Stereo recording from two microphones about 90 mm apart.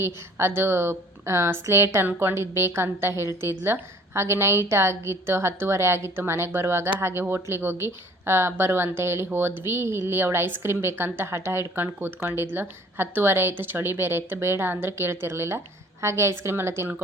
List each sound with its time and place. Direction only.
0.0 s a woman's voice: 30° right (ahead or behind)